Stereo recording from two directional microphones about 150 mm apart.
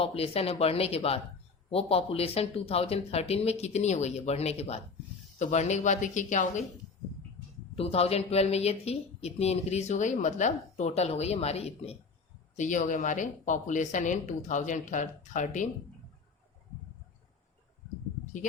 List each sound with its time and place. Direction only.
0.0 s speech: 40° left (ahead or behind); by 6.6 s 55° left (ahead or behind)
7.8 s speech: 40° left (ahead or behind)
12.5 s a woman's voice: 55° left (ahead or behind)